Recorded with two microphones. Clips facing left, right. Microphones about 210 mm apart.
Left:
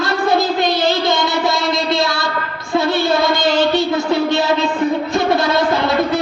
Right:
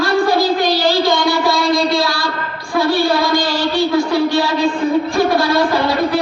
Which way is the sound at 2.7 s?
20° left (ahead or behind).